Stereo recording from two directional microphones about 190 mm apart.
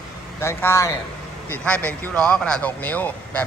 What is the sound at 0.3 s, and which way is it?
A man's voice, 15° left (ahead or behind).